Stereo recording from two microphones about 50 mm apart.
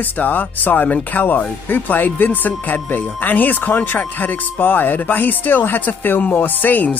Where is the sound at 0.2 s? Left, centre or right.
Left.